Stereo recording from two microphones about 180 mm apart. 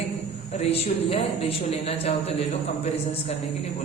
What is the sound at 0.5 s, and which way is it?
A woman's voice, 35° left (ahead or behind).